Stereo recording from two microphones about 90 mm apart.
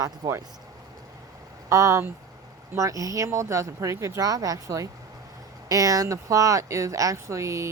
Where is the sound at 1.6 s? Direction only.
35° right (ahead or behind).